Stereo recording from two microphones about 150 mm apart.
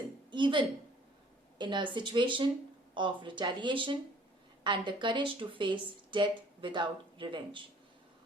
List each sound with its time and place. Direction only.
0.3 s a woman's voice: 30° right (ahead or behind)